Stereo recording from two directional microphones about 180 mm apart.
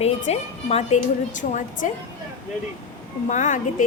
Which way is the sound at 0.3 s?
40° left (ahead or behind).